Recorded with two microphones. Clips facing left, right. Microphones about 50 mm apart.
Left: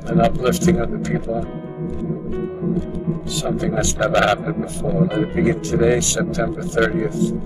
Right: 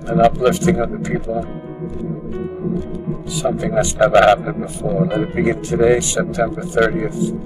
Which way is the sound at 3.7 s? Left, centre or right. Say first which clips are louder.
Right 7 dB; centre.